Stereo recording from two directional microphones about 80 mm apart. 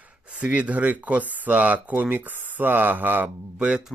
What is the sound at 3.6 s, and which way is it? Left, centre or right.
Speech, centre.